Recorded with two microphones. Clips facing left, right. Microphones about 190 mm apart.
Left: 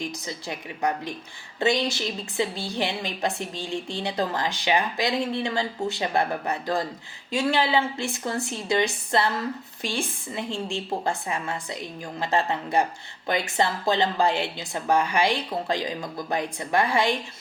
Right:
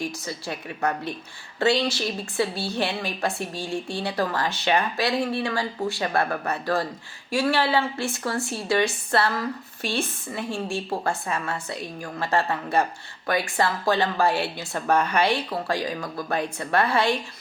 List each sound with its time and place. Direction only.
0.0 s a woman's voice: 20° left (ahead or behind)